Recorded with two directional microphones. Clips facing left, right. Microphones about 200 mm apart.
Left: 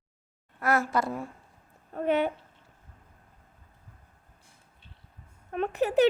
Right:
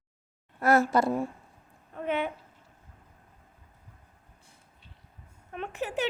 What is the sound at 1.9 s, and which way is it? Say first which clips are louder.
Speech: left 4 dB; 40° left (ahead or behind).